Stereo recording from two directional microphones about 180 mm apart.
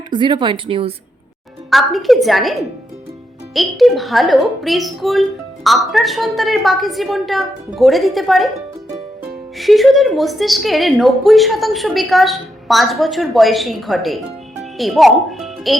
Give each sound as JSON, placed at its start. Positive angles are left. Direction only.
{"t": 0.1, "sound": "speech", "side_deg": -25}
{"t": 1.7, "sound": "speech", "side_deg": 0}
{"t": 9.6, "sound": "speech", "side_deg": 0}